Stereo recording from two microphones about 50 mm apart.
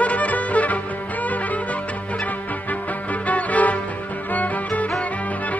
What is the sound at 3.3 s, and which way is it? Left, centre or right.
Music, left.